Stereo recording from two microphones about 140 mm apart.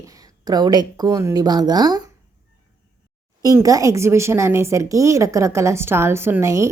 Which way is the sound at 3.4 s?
25° right (ahead or behind).